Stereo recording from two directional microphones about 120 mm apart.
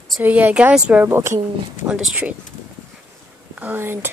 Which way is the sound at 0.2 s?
15° right (ahead or behind).